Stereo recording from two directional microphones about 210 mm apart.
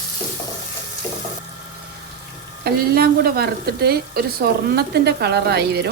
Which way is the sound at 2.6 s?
45° right (ahead or behind).